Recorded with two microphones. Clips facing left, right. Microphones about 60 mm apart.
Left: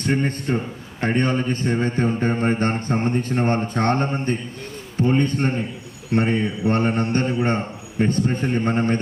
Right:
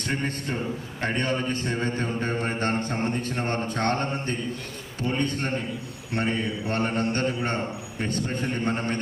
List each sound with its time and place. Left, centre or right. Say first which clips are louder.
1.0 s a man's voice: left 6 dB; left